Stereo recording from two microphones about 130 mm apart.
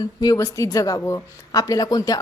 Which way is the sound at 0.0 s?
30° left (ahead or behind).